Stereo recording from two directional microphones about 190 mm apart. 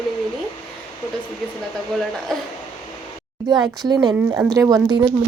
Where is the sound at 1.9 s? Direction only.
Centre (ahead or behind).